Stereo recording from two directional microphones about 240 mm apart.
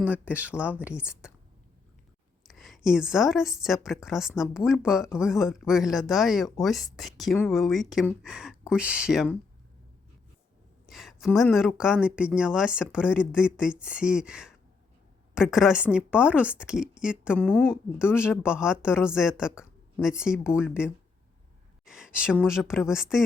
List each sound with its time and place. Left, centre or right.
0.0 s a woman's voice: centre
2.5 s a woman's voice: centre
10.8 s a sound: centre
11.3 s a woman's voice: centre